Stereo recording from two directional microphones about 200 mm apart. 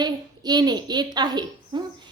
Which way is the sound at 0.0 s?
20° right (ahead or behind).